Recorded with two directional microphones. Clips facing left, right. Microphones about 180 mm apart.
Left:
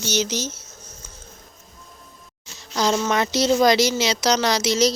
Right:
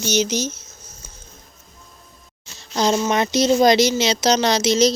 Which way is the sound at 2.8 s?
20° right (ahead or behind).